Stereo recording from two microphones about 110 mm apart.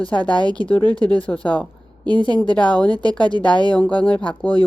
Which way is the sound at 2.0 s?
40° right (ahead or behind).